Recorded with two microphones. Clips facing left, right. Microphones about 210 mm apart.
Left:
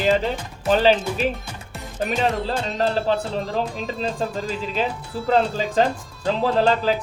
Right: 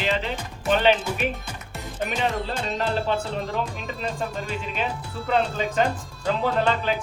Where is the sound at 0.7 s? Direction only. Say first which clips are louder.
Left 3 dB; 35° left (ahead or behind).